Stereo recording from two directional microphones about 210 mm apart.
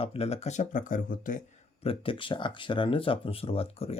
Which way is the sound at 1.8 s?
25° left (ahead or behind).